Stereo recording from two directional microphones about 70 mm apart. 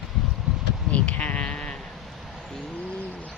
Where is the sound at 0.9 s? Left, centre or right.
Centre.